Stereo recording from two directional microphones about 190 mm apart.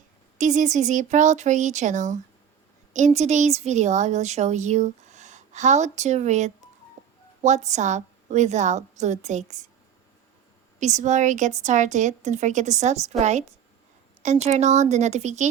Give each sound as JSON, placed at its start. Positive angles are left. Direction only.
{"t": 0.3, "sound": "a woman's voice", "side_deg": -40}
{"t": 10.8, "sound": "a woman's voice", "side_deg": -40}